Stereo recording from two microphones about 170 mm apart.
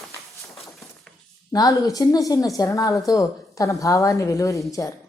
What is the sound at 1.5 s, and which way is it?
A woman's voice, 20° left (ahead or behind).